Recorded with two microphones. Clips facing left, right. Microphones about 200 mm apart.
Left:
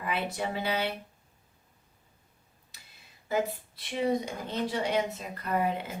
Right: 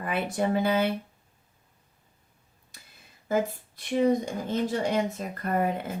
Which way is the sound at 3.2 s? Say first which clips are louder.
Right 3 dB; 45° right (ahead or behind).